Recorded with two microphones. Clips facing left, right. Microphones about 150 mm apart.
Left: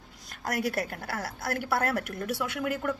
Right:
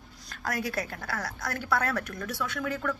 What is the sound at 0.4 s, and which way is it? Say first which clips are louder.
A woman's voice: left 2 dB; 30° left (ahead or behind).